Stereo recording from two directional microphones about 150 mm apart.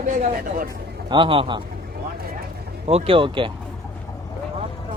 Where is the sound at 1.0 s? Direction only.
35° right (ahead or behind).